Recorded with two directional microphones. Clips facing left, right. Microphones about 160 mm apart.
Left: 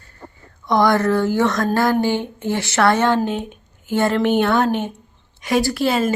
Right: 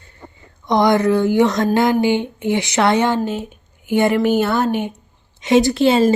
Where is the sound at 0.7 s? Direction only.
20° right (ahead or behind).